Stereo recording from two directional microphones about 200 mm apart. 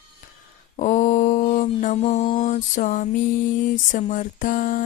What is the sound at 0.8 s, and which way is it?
Mantra, 40° left (ahead or behind).